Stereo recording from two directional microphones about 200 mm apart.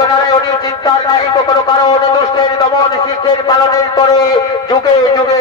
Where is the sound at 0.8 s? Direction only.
20° left (ahead or behind).